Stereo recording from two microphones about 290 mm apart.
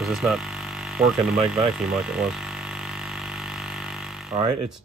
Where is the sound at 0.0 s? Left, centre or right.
Centre.